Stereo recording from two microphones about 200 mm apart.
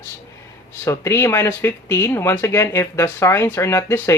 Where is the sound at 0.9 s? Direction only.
15° left (ahead or behind).